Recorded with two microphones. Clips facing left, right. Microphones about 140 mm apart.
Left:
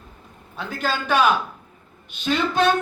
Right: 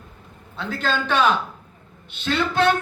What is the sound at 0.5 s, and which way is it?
Speech, 15° left (ahead or behind).